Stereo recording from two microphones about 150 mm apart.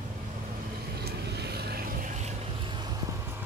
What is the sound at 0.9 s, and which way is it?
Vehicle, 90° right.